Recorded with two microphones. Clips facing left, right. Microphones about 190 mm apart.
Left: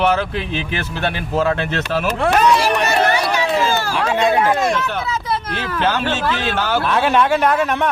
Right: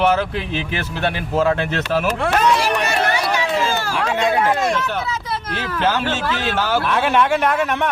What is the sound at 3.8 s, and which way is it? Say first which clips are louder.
Run: left 2 dB; 35° left (ahead or behind).